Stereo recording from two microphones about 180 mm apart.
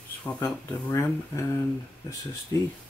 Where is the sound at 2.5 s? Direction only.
15° left (ahead or behind).